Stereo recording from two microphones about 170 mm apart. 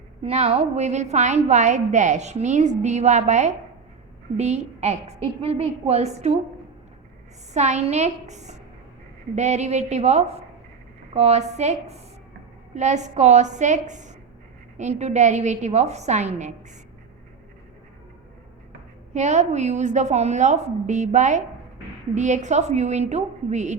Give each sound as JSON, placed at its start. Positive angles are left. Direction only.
{"t": 0.2, "sound": "a woman's voice", "side_deg": -40}
{"t": 7.5, "sound": "a woman's voice", "side_deg": -40}
{"t": 19.1, "sound": "a woman's voice", "side_deg": -40}